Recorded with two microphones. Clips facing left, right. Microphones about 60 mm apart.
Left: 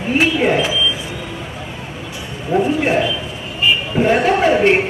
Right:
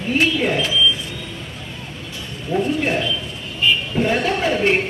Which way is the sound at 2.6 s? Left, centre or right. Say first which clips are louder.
Left 4 dB; centre.